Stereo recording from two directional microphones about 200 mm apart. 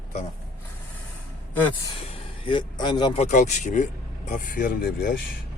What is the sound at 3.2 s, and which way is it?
Speech, 40° left (ahead or behind).